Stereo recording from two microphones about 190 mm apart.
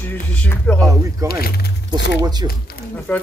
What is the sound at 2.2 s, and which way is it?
Speech, 20° right (ahead or behind).